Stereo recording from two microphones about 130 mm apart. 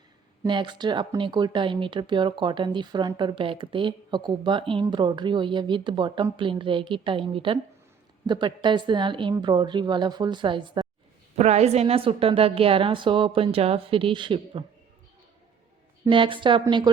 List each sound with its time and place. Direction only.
0.4 s speech: 35° right (ahead or behind)
11.3 s a woman's voice: 60° right (ahead or behind); by 14.6 s 40° right (ahead or behind)
16.0 s speech: 40° right (ahead or behind)